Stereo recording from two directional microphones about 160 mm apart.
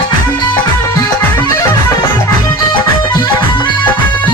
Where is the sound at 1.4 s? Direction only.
20° left (ahead or behind).